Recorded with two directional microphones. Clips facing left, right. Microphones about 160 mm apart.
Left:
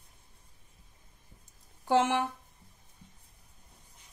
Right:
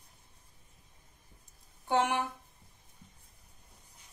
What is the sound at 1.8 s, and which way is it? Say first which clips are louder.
Speech: left 3 dB; 90° left.